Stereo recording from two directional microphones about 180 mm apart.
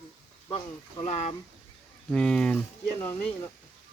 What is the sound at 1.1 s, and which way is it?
Speech, 40° left (ahead or behind).